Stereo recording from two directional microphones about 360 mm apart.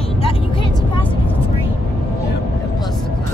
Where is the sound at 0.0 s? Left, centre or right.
Centre.